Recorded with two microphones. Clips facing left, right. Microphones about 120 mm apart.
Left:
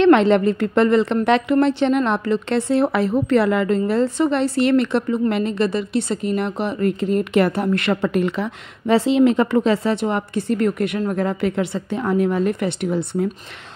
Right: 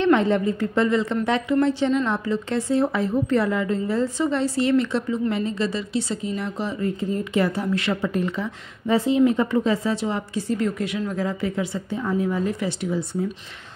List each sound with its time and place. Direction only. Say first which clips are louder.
0.0 s a woman's voice: left 6 dB; 80° left; by 13.3 s 60° left (ahead or behind)